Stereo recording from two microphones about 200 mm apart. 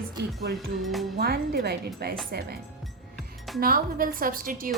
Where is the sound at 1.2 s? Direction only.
50° right (ahead or behind).